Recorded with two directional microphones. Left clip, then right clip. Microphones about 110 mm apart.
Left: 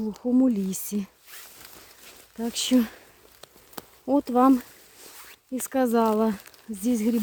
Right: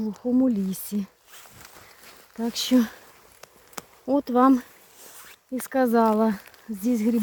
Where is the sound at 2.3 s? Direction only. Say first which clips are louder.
Right 1 dB; centre (ahead or behind).